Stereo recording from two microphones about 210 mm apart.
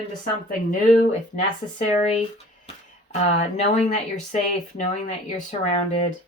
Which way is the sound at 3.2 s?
35° left (ahead or behind).